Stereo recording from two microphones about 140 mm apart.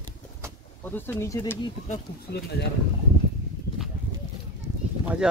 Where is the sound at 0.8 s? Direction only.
15° left (ahead or behind).